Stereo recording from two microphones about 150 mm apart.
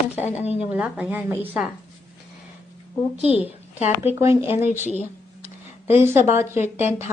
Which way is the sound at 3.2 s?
45° left (ahead or behind).